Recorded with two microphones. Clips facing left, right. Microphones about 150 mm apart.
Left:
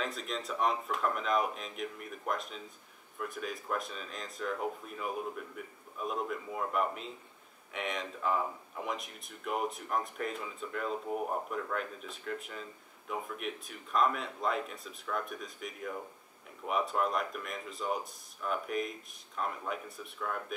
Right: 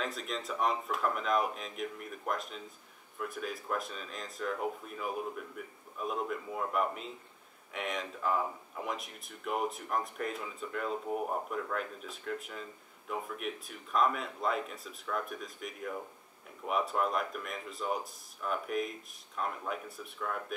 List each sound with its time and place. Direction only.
0.0 s speech: centre (ahead or behind)